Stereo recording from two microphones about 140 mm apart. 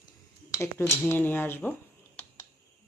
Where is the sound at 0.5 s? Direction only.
20° left (ahead or behind).